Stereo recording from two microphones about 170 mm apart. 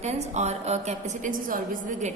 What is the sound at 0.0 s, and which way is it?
A woman's voice, 40° right (ahead or behind).